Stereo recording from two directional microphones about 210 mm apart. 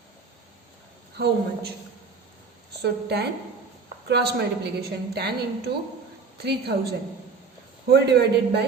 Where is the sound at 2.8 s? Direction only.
50° right (ahead or behind).